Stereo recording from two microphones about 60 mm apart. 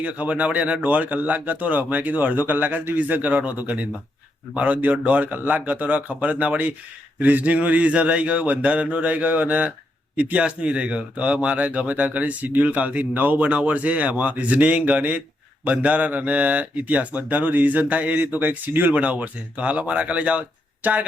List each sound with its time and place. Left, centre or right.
0.0 s speech: right